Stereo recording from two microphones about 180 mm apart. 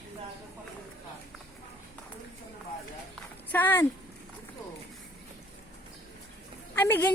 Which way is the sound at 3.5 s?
10° left (ahead or behind).